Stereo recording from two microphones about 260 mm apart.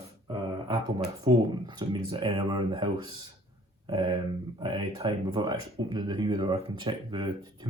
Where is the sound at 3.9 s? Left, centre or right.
Centre.